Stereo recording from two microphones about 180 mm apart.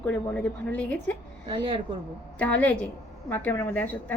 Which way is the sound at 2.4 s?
10° left (ahead or behind).